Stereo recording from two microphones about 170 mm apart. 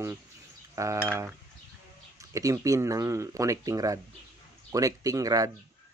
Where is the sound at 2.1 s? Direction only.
20° right (ahead or behind).